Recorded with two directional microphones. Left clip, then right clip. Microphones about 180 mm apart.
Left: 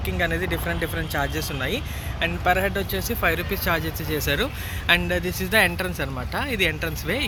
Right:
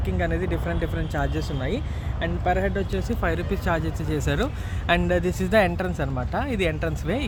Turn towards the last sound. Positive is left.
turn(degrees=-50)  # may be behind; listen again after turning